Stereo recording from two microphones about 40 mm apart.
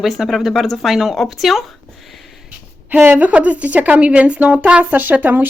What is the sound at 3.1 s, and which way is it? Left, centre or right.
Speech, right.